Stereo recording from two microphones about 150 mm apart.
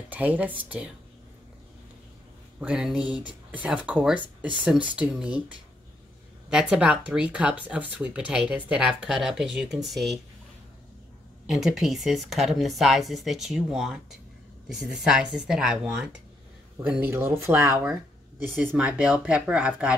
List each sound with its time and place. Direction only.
0.1 s speech: 10° right (ahead or behind)
2.6 s speech: 5° right (ahead or behind)
11.4 s speech: 5° right (ahead or behind); by 17.7 s 20° right (ahead or behind)
18.7 s speech: 5° right (ahead or behind)